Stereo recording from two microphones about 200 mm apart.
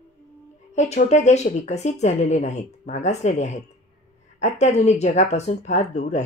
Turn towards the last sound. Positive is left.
turn(degrees=35)  # may be behind; listen again after turning